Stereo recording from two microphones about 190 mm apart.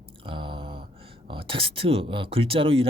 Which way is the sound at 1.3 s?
30° right (ahead or behind).